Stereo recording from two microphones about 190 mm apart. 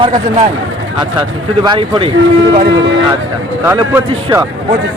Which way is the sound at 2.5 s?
55° right (ahead or behind).